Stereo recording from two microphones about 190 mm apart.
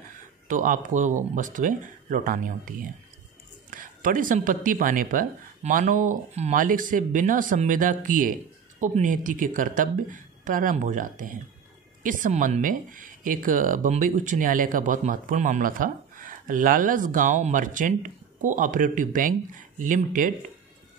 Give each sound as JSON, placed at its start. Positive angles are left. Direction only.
{"t": 0.5, "sound": "speech", "side_deg": -40}
{"t": 3.7, "sound": "speech", "side_deg": -45}